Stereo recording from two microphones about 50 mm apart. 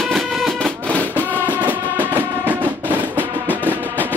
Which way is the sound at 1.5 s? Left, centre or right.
Right.